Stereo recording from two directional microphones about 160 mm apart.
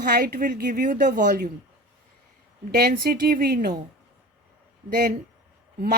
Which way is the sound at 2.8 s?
70° right (ahead or behind).